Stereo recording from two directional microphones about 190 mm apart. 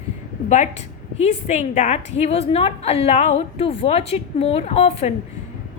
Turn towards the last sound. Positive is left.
turn(degrees=35)  # may be behind; listen again after turning